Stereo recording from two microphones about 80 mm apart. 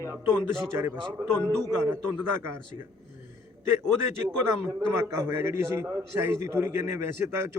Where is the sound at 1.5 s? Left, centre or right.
Right.